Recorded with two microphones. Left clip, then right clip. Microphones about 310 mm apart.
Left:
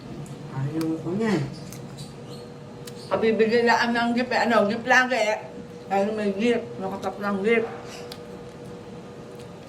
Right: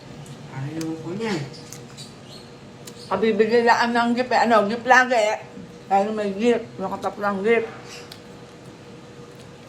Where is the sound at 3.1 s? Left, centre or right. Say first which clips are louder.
Right 2 dB; centre.